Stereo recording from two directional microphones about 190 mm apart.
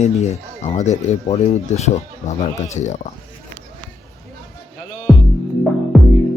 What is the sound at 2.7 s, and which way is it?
Speech, 40° left (ahead or behind).